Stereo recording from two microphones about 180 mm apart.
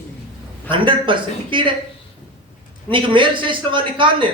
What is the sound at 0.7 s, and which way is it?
A man's voice, 25° right (ahead or behind).